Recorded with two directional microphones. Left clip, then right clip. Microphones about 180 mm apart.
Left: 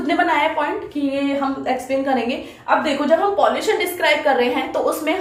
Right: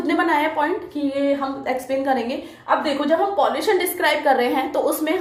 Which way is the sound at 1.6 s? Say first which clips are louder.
Left 1 dB; 45° right (ahead or behind).